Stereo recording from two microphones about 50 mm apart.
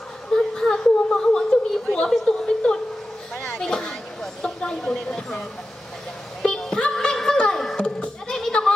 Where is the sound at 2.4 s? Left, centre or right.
Centre.